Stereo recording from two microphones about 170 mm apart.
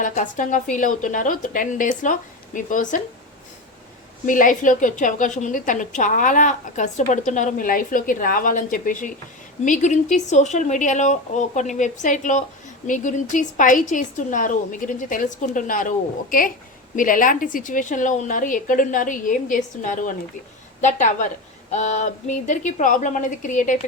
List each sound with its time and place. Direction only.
0.0 s a woman's voice: 50° left (ahead or behind)
4.3 s a woman's voice: 50° left (ahead or behind)